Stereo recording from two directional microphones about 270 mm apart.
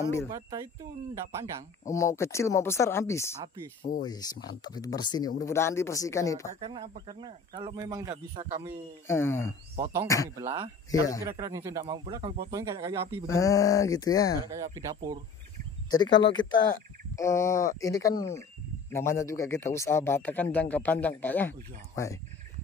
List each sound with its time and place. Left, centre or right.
1.1 s speech: centre
1.9 s a man's voice: centre
6.6 s speech: centre
9.0 s a man's voice: centre
10.4 s speech: centre
10.9 s a man's voice: centre
11.2 s speech: centre
13.3 s a man's voice: centre
14.5 s speech: centre
15.9 s a man's voice: centre